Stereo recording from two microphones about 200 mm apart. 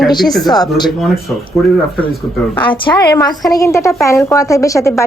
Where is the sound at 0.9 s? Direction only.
Centre (ahead or behind).